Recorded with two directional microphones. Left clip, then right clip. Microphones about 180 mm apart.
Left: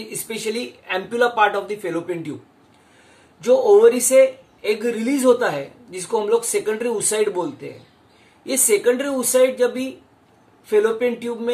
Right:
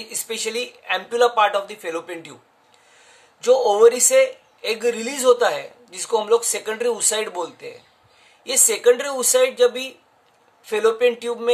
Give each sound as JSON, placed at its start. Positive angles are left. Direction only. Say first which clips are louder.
{"t": 0.1, "sound": "speech", "louder": "even", "side_deg": -40}
{"t": 3.3, "sound": "speech", "louder": "left 2 dB", "side_deg": -40}